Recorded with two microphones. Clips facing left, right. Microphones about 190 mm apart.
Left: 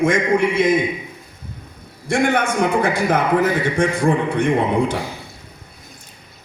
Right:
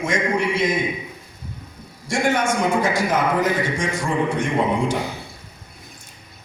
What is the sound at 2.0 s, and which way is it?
A man's voice, 60° left (ahead or behind).